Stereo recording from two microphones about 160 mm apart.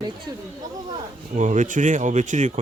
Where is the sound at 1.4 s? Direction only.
50° right (ahead or behind).